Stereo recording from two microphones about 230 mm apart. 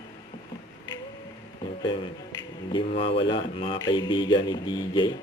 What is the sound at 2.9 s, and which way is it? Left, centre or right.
Speech, left.